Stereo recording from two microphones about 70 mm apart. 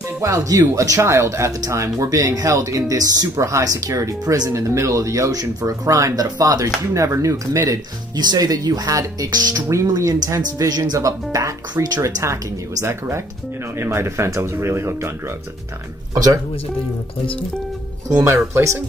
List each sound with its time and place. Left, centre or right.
0.2 s speech: right
3.3 s speech: right
8.2 s speech: right
9.8 s speech: right
18.2 s speech: right